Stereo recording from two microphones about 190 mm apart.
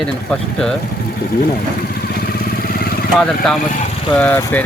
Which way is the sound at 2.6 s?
50° left (ahead or behind).